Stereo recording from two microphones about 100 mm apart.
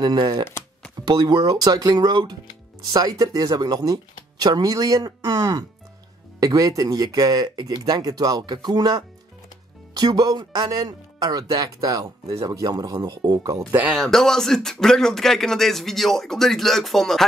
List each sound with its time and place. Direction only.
0.0 s speech: 45° right (ahead or behind)
13.8 s speech: centre (ahead or behind)